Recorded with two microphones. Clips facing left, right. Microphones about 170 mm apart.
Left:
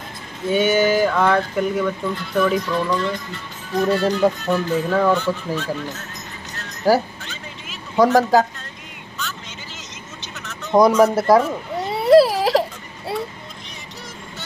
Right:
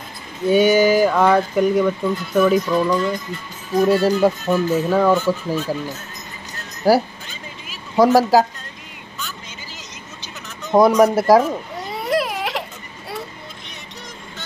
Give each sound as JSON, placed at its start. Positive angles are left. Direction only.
{"t": 0.5, "sound": "speech", "side_deg": -10}
{"t": 6.8, "sound": "speech", "side_deg": -10}
{"t": 10.4, "sound": "a sound", "side_deg": -5}
{"t": 10.9, "sound": "speech", "side_deg": -10}
{"t": 11.9, "sound": "baby cry", "side_deg": 30}